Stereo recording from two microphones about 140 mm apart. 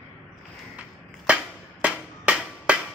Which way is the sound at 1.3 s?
10° right (ahead or behind).